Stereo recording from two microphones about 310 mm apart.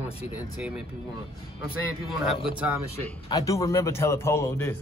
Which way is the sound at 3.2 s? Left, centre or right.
Centre.